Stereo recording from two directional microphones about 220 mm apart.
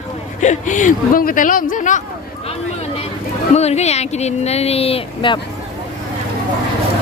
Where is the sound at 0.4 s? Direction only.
35° left (ahead or behind).